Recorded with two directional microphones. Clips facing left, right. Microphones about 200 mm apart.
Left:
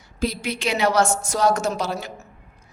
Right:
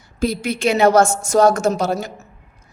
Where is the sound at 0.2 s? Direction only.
50° right (ahead or behind).